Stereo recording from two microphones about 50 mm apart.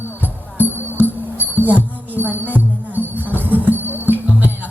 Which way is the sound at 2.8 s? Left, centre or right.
Right.